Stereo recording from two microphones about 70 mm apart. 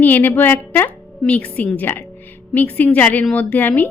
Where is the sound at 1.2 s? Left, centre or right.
Centre.